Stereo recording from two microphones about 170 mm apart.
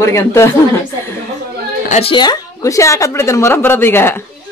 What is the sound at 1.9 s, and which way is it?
A woman's voice, 35° left (ahead or behind).